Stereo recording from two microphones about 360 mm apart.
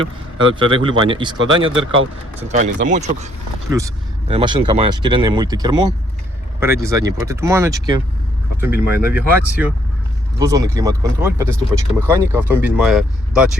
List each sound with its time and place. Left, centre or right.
0.3 s speech: centre
3.7 s speech: centre